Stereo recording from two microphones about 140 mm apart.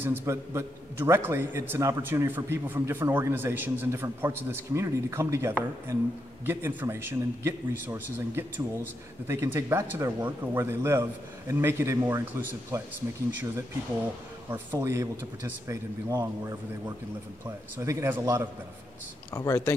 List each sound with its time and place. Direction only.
0.0 s a man's voice: 15° right (ahead or behind)
14.5 s a man's voice: 15° right (ahead or behind)
17.7 s a man's voice: 15° right (ahead or behind)
19.3 s speech: 20° left (ahead or behind)